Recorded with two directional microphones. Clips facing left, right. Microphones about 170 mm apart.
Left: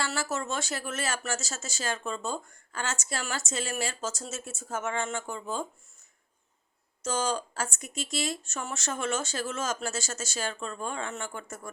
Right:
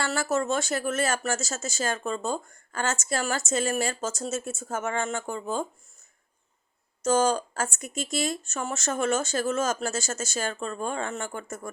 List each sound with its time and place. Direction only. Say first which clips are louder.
0.0 s speech: right 5 dB; 50° right (ahead or behind)
7.0 s speech: right 7 dB; 45° right (ahead or behind)